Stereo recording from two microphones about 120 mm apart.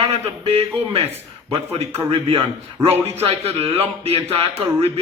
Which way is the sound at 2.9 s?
60° right (ahead or behind).